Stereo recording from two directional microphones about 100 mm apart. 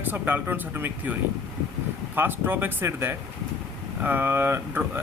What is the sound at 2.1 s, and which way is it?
Speech, 20° right (ahead or behind).